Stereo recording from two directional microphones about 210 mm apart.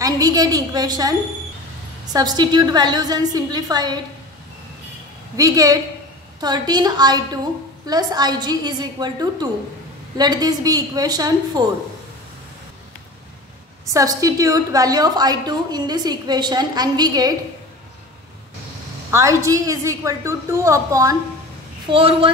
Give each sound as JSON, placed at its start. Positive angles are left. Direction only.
{"t": 0.0, "sound": "a woman's voice", "side_deg": -20}
{"t": 2.1, "sound": "a woman's voice", "side_deg": -20}
{"t": 5.3, "sound": "a woman's voice", "side_deg": -15}
{"t": 13.9, "sound": "a woman's voice", "side_deg": -15}
{"t": 19.0, "sound": "a woman's voice", "side_deg": -15}